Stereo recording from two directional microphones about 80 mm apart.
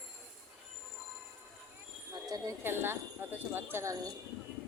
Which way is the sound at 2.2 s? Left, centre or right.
Right.